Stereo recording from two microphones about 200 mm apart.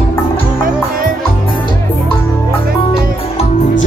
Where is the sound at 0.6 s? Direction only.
45° right (ahead or behind).